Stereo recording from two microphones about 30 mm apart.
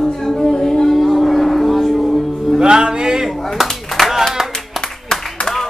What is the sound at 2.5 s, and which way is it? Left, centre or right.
Music, right.